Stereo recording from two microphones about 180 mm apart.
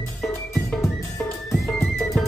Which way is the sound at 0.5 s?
Centre (ahead or behind).